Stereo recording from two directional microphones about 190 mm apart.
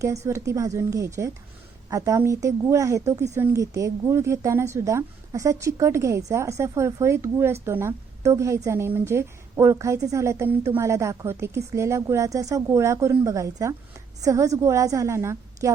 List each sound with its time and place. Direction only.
0.3 s speech: 15° right (ahead or behind)